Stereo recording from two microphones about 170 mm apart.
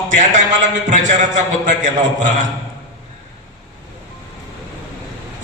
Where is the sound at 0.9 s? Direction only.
45° right (ahead or behind).